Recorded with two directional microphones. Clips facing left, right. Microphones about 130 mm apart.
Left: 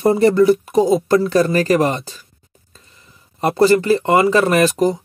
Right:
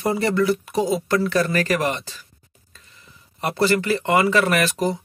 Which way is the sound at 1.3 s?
30° left (ahead or behind).